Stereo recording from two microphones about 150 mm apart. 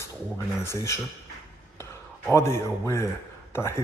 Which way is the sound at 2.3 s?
20° left (ahead or behind).